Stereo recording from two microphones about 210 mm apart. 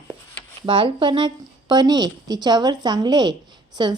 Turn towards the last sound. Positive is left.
turn(degrees=-20)  # may be behind; listen again after turning